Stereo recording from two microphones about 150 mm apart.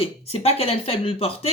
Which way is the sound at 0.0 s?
40° left (ahead or behind).